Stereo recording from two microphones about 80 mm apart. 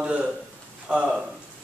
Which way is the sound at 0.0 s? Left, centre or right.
Centre.